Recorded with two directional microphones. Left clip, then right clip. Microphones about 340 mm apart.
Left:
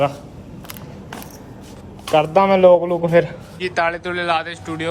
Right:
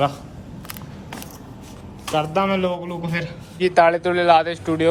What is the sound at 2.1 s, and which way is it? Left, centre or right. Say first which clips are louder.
A man's voice: left 6 dB; centre.